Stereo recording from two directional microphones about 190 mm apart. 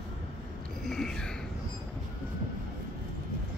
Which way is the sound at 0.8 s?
5° left (ahead or behind).